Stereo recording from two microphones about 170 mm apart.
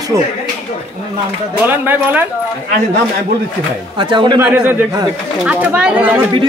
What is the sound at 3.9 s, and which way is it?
Speech, 25° right (ahead or behind).